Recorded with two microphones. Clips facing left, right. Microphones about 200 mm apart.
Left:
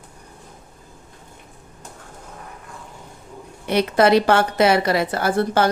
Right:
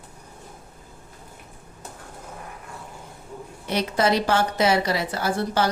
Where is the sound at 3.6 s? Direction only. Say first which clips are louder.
Left 6 dB; 60° left (ahead or behind).